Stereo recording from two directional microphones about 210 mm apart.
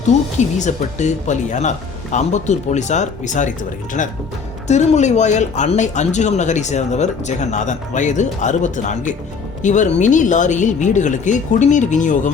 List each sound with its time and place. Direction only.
0.3 s speech: 35° left (ahead or behind)
4.7 s speech: 35° left (ahead or behind)